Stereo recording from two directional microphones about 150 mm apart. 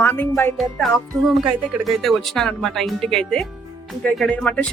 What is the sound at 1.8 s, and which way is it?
A man's voice, centre (ahead or behind).